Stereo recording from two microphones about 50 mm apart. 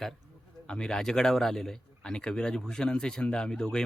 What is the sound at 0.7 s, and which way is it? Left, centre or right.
Speech, centre.